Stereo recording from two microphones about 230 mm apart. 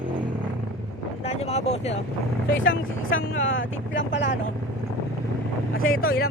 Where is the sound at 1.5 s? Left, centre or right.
Left.